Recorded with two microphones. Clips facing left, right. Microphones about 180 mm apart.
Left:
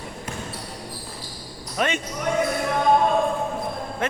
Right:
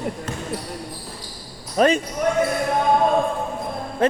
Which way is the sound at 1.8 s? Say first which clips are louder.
Right 8 dB; 35° right (ahead or behind).